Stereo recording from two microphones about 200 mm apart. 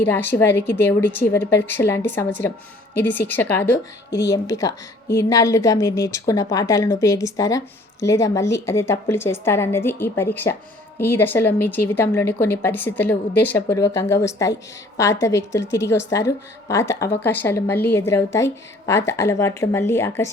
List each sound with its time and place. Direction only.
0.0 s a woman's voice: 10° left (ahead or behind)